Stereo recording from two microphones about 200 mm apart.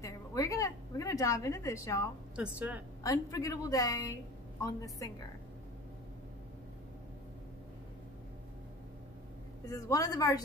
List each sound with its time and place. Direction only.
0.0 s a sound: 15° left (ahead or behind)
2.3 s a woman's voice: 5° right (ahead or behind)
3.0 s a woman's voice: 15° left (ahead or behind)
9.7 s a woman's voice: 15° left (ahead or behind)